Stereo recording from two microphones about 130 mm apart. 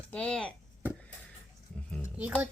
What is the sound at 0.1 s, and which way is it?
Speech, 10° left (ahead or behind).